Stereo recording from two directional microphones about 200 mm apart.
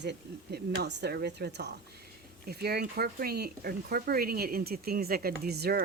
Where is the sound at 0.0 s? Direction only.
55° right (ahead or behind).